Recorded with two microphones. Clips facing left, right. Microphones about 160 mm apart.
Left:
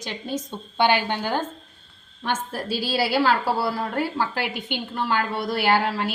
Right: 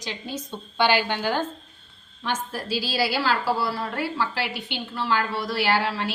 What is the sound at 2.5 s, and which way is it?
A woman's voice, 55° left (ahead or behind).